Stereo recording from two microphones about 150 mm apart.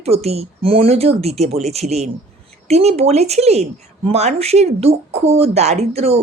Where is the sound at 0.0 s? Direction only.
45° right (ahead or behind).